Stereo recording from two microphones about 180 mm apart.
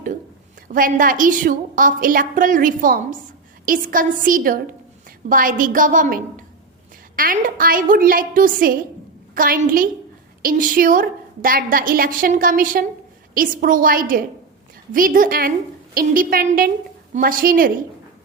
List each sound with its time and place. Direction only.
0.7 s a woman's voice: 50° right (ahead or behind)